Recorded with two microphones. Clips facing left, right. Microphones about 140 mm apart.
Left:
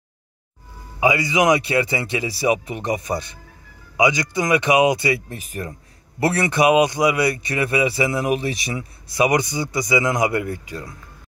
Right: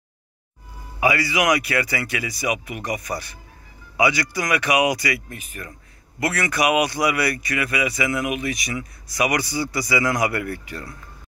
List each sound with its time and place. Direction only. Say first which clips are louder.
0.9 s speech: left 2 dB; 20° left (ahead or behind)